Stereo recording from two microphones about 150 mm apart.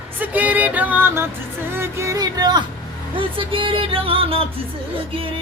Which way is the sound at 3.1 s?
35° right (ahead or behind).